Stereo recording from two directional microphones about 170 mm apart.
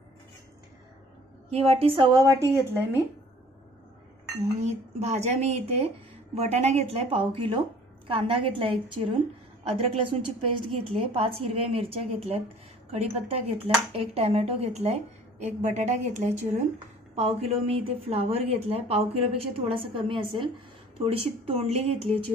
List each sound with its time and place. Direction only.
1.5 s a woman's voice: 35° right (ahead or behind)
2.7 s a woman's voice: 10° right (ahead or behind)
4.6 s a woman's voice: 40° right (ahead or behind)